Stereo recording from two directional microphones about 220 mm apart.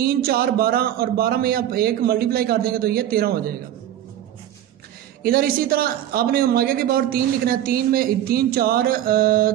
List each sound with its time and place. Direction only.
0.0 s speech: 45° right (ahead or behind)
5.2 s speech: 40° right (ahead or behind)